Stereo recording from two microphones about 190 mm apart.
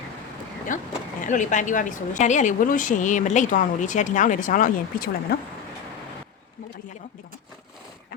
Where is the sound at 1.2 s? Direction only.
40° left (ahead or behind).